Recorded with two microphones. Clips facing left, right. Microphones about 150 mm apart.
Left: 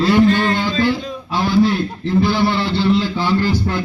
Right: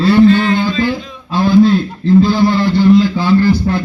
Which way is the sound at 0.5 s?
15° right (ahead or behind).